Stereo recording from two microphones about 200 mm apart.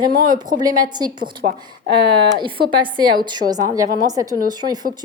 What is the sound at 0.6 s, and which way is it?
Speech, 20° right (ahead or behind).